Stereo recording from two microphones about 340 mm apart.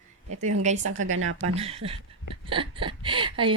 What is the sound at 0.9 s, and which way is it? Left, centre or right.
Speech, right.